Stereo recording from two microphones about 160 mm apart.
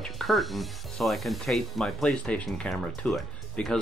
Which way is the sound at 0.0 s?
Centre (ahead or behind).